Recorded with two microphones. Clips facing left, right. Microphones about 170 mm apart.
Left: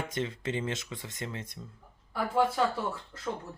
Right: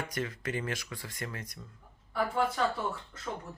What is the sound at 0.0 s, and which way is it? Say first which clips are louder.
Speech: left 2 dB; 25° left (ahead or behind).